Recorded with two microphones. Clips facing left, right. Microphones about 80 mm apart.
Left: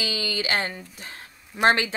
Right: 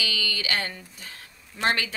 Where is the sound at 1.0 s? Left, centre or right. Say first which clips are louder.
Left 3 dB; left.